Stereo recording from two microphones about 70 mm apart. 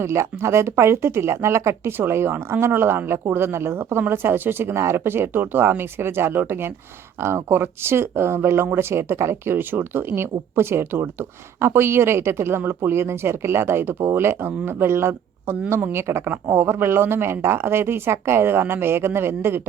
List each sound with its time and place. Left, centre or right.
0.0 s speech: right